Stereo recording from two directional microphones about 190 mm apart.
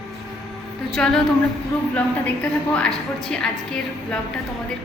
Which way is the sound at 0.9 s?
Centre (ahead or behind).